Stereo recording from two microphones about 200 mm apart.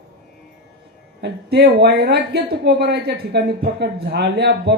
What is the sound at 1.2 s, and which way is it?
Speech, 55° right (ahead or behind).